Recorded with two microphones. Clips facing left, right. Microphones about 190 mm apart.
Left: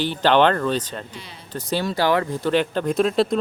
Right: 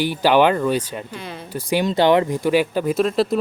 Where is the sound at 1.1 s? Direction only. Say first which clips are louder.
Right 8 dB; 55° right (ahead or behind).